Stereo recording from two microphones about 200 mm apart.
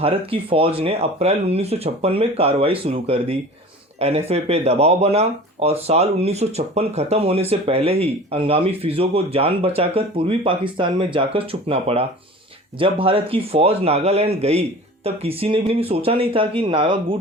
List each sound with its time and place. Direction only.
0.0 s speech: 25° right (ahead or behind)